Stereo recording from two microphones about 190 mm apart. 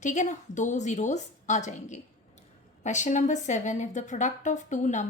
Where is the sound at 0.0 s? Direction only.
40° left (ahead or behind).